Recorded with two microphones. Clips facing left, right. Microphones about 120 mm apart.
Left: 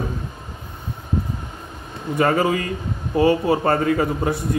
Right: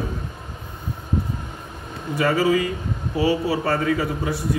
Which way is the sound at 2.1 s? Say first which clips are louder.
Even; 50° left (ahead or behind).